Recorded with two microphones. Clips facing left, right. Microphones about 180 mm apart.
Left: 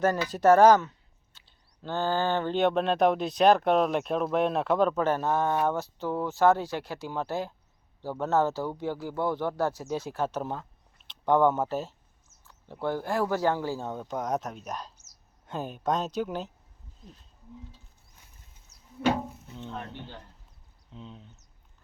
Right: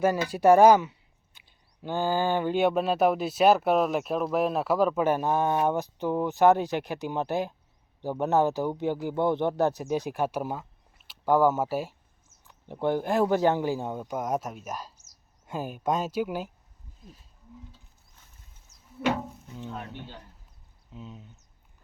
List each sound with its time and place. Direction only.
0.0 s speech: 10° right (ahead or behind)
19.3 s speech: 5° right (ahead or behind)